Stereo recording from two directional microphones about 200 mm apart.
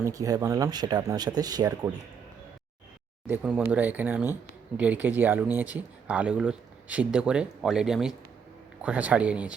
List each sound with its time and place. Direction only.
0.0 s speech: 15° right (ahead or behind)
3.2 s speech: 5° right (ahead or behind)